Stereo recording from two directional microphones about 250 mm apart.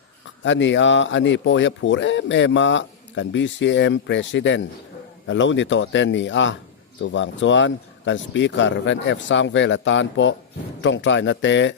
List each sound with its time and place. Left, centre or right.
0.4 s speech: left